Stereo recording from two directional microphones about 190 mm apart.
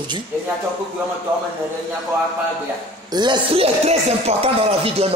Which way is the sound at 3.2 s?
25° right (ahead or behind).